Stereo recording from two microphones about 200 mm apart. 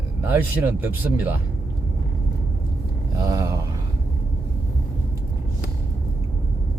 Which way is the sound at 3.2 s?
15° right (ahead or behind).